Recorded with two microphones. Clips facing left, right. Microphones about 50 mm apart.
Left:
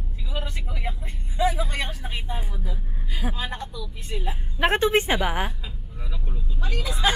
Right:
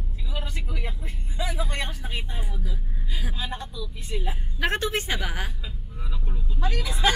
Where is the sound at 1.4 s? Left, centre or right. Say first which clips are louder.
Left 7 dB; left.